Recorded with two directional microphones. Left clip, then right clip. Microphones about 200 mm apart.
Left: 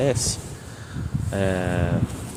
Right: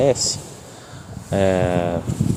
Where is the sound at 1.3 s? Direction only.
30° right (ahead or behind).